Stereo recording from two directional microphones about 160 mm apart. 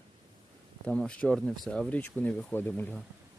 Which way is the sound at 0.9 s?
5° left (ahead or behind).